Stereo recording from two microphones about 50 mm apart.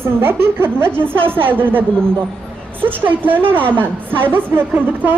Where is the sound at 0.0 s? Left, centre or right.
Right.